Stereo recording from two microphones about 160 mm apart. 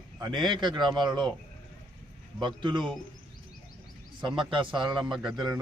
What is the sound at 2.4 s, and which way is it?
Speech, 30° right (ahead or behind).